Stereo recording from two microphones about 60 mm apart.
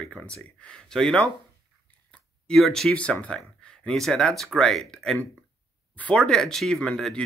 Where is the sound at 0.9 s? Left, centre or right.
Centre.